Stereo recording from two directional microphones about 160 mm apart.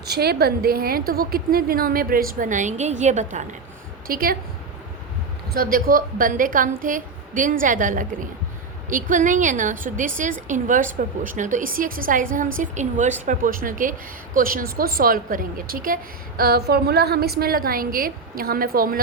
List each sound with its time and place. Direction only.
0.0 s a woman's voice: 80° right; by 3.5 s 50° right (ahead or behind)
4.0 s a woman's voice: 65° right (ahead or behind)
5.5 s a woman's voice: 65° right (ahead or behind)
13.2 s a woman's voice: 60° right (ahead or behind)
16.4 s a woman's voice: 80° right; by 18.9 s 65° right (ahead or behind)